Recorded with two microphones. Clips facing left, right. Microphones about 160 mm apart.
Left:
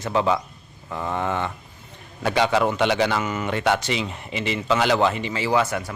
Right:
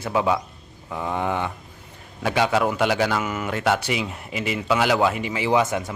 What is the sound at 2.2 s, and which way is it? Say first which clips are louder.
A man's voice: left 1 dB; 5° right (ahead or behind).